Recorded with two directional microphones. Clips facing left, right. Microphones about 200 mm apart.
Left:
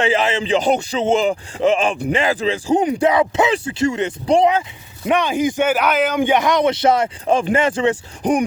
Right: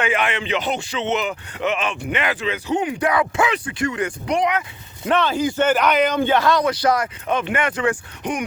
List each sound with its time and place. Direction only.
0.0 s speech: 25° left (ahead or behind)
5.0 s speech: 15° left (ahead or behind)
6.1 s speech: 15° left (ahead or behind); by 8.4 s 35° left (ahead or behind)